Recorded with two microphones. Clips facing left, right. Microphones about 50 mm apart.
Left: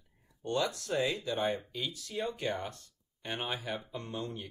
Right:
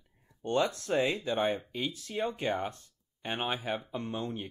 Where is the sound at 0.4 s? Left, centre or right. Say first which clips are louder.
Right 3 dB; right.